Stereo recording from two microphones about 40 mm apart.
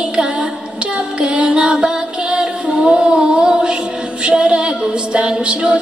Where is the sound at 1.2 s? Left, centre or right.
Right.